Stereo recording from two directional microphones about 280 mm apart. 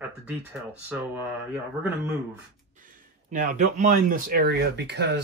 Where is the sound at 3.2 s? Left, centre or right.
Right.